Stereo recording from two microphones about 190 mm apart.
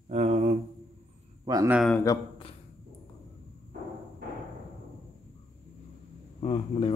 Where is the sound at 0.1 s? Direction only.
35° right (ahead or behind).